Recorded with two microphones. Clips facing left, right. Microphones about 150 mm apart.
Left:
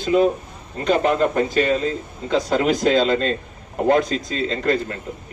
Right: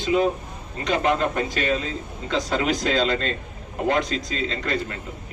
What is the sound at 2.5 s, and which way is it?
Speech, 40° left (ahead or behind).